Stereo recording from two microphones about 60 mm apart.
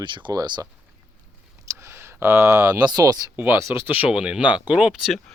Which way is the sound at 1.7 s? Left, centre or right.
Right.